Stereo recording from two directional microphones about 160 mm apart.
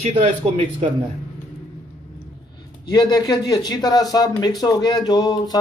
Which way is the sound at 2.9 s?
25° left (ahead or behind).